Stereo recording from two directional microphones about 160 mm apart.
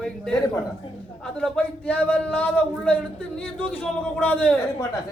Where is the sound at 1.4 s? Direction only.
10° left (ahead or behind).